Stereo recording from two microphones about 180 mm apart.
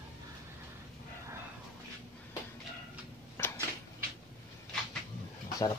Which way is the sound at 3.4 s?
15° left (ahead or behind).